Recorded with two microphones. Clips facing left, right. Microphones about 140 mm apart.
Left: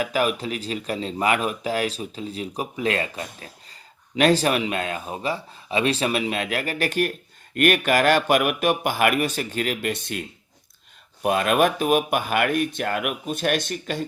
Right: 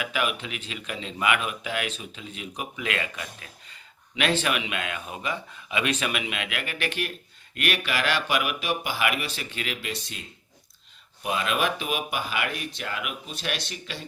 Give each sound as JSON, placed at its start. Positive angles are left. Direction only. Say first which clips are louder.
{"t": 0.0, "sound": "speech", "louder": "left 6 dB", "side_deg": 40}